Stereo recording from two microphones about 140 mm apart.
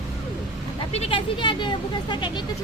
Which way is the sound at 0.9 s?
45° left (ahead or behind).